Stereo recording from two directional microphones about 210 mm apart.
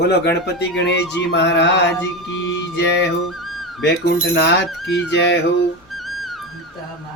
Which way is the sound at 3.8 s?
50° left (ahead or behind).